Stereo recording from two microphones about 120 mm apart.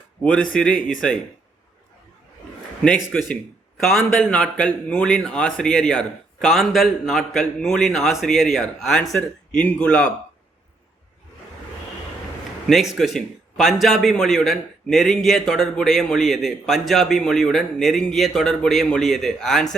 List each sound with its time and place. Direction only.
0.2 s speech: 10° left (ahead or behind)
3.8 s a man's voice: 5° left (ahead or behind)
12.6 s a man's voice: centre (ahead or behind)